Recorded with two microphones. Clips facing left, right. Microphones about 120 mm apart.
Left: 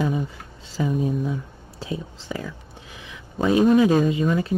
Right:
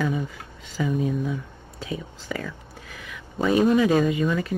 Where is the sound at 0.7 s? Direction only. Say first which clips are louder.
Left 1 dB; 30° left (ahead or behind).